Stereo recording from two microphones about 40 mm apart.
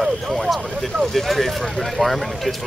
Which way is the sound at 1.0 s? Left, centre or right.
Centre.